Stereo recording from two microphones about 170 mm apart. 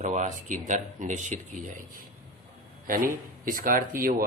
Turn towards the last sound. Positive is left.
turn(degrees=-55)  # may be behind; listen again after turning